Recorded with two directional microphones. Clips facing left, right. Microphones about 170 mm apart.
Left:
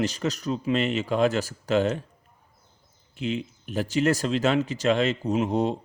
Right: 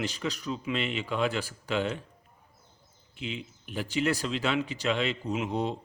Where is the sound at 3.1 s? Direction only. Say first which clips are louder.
Left 8 dB; 45° left (ahead or behind).